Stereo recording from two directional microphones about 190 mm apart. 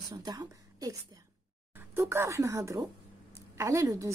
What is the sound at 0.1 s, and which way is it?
Speech, 20° right (ahead or behind).